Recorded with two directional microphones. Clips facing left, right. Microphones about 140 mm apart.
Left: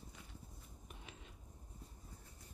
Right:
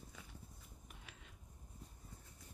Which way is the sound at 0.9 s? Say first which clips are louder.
Left 5 dB; 25° left (ahead or behind).